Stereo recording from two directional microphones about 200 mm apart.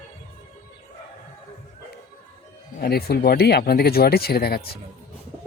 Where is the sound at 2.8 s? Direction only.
50° left (ahead or behind).